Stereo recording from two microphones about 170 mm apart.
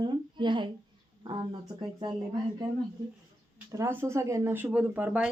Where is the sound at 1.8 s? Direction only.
25° right (ahead or behind).